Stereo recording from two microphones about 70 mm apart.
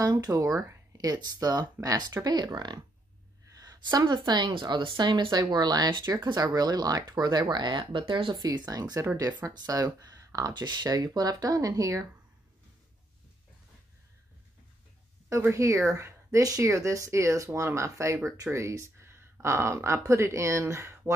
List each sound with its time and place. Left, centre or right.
0.0 s speech: right
0.9 s speech: right
3.5 s a sound: right
4.1 s speech: right
6.2 s speech: right
9.3 s speech: right
9.7 s speech: right
10.5 s speech: right
15.4 s speech: right